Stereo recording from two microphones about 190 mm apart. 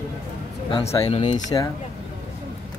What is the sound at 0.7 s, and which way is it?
Speech, 25° left (ahead or behind).